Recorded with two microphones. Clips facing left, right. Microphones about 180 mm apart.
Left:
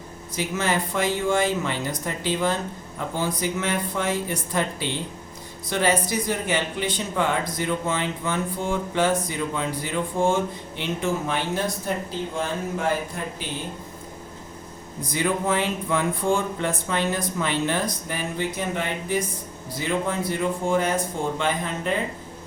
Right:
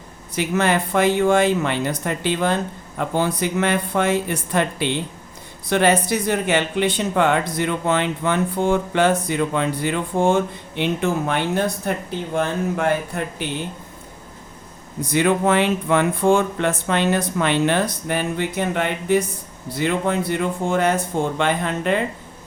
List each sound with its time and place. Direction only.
0.3 s speech: 65° right (ahead or behind)
15.1 s speech: 70° right (ahead or behind)